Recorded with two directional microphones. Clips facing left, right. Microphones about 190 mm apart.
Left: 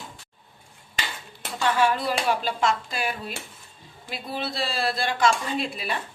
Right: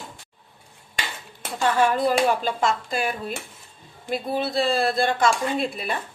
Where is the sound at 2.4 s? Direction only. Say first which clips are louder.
Right 1 dB; 50° right (ahead or behind).